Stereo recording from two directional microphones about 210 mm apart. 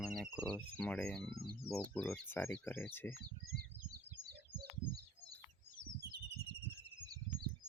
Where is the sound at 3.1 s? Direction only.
45° right (ahead or behind).